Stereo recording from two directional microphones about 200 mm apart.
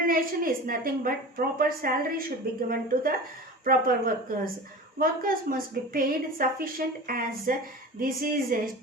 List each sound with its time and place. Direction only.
0.1 s a woman's voice: 45° right (ahead or behind)